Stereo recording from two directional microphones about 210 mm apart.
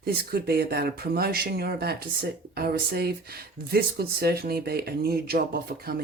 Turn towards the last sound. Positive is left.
turn(degrees=-45)  # may be behind; listen again after turning